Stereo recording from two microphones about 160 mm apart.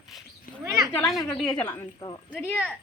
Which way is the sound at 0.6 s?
20° right (ahead or behind).